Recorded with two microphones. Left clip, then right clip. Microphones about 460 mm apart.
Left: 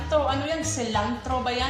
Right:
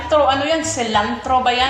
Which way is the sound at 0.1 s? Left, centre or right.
Right.